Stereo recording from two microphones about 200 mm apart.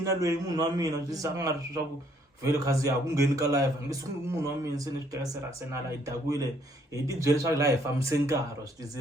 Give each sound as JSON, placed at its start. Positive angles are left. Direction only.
{"t": 0.0, "sound": "a man's voice", "side_deg": -15}